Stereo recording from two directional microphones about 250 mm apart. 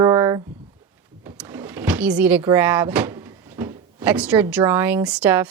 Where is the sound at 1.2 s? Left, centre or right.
Centre.